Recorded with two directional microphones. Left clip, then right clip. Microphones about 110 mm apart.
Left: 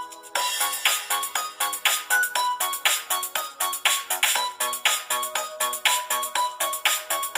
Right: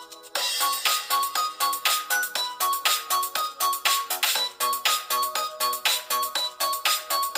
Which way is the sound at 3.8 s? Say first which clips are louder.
Left 1 dB; 50° right (ahead or behind).